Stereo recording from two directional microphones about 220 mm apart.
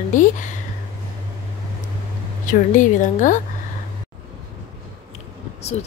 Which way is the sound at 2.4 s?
35° left (ahead or behind).